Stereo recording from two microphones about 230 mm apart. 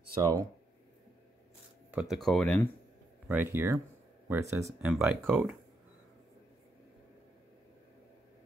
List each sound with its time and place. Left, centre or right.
0.2 s speech: centre
1.9 s speech: centre
3.3 s speech: centre